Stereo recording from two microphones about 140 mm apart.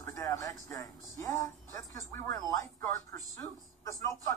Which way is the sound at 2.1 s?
20° left (ahead or behind).